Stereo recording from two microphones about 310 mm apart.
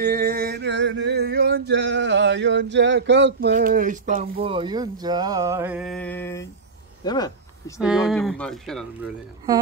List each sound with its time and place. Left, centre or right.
0.0 s a sound: right; by 6.4 s centre
7.1 s speech: centre
7.8 s speech: centre